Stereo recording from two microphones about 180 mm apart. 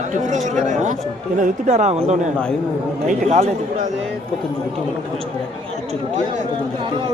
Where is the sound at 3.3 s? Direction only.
40° right (ahead or behind).